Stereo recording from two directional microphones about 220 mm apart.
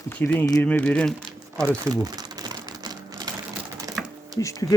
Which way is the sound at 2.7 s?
15° right (ahead or behind).